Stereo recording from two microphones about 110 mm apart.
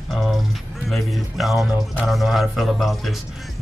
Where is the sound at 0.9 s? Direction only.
Centre (ahead or behind).